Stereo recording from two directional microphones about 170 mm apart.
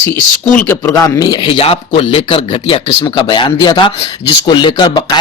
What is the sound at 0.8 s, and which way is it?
Speech, 20° left (ahead or behind).